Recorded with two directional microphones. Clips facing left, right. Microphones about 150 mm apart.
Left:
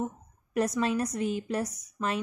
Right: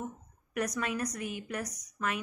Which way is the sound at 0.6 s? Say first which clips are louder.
Left 6 dB; 30° left (ahead or behind).